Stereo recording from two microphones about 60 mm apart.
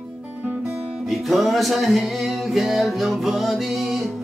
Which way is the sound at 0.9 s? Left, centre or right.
Centre.